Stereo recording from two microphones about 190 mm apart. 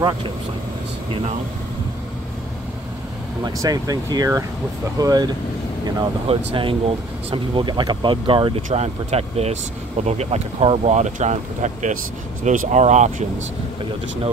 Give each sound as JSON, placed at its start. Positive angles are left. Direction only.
{"t": 3.4, "sound": "speech", "side_deg": -20}